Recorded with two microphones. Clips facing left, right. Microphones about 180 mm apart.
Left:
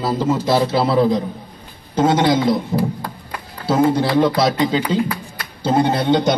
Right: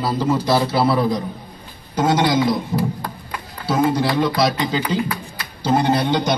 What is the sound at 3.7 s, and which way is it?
A man's voice, 25° left (ahead or behind).